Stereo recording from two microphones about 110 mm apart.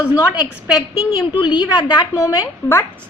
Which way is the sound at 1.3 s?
45° left (ahead or behind).